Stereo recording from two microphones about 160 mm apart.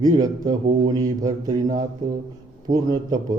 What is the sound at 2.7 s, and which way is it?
Mantra, 25° right (ahead or behind).